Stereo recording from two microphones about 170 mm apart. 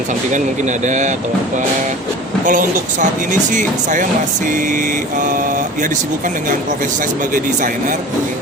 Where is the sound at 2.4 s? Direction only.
50° right (ahead or behind).